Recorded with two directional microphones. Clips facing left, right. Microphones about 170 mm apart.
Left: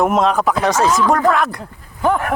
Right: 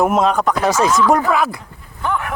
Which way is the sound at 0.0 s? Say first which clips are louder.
Even; centre (ahead or behind).